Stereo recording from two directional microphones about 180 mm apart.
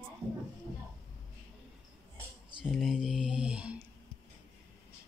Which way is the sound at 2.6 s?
Centre (ahead or behind).